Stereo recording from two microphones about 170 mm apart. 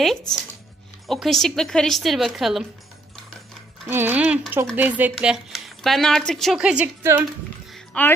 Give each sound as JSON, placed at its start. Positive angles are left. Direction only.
{"t": 1.0, "sound": "a woman's voice", "side_deg": 0}
{"t": 3.8, "sound": "a woman's voice", "side_deg": -10}
{"t": 7.7, "sound": "music", "side_deg": 10}